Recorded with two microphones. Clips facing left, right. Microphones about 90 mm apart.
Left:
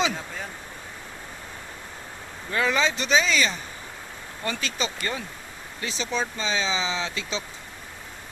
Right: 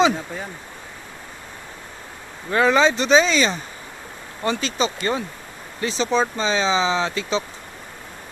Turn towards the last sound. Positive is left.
turn(degrees=-40)  # may be behind; listen again after turning